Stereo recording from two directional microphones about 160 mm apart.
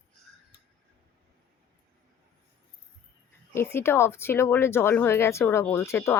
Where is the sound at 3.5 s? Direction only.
15° left (ahead or behind).